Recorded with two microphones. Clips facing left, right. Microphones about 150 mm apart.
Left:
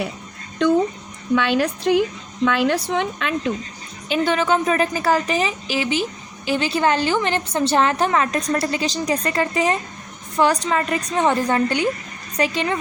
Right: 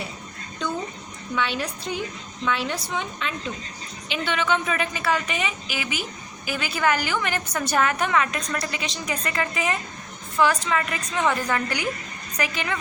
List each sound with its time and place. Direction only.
1.4 s a woman's voice: 65° left (ahead or behind)
4.1 s a woman's voice: 40° left (ahead or behind)